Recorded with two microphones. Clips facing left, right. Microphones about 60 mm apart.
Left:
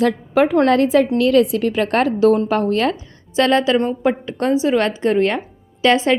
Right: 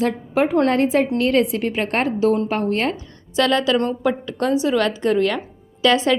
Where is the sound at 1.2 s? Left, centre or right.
Left.